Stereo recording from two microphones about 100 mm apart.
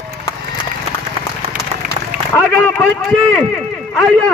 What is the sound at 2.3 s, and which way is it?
A man's voice, 15° left (ahead or behind).